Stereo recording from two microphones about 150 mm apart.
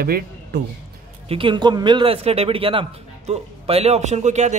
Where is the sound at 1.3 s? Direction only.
35° right (ahead or behind).